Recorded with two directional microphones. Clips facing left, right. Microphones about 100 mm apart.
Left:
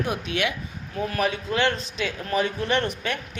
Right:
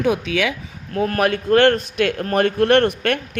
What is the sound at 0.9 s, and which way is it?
A man's voice, 65° right (ahead or behind).